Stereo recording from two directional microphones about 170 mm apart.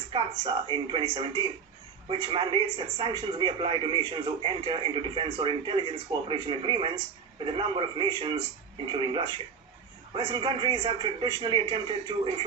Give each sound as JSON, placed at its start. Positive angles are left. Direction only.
{"t": 0.1, "sound": "speech", "side_deg": -30}